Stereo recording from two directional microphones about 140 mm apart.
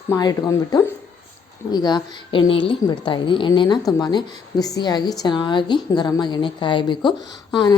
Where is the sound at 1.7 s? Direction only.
30° left (ahead or behind).